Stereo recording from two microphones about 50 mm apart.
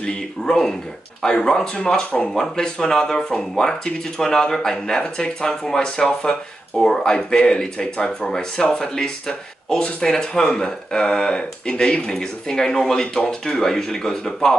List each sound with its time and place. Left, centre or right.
0.0 s speech: centre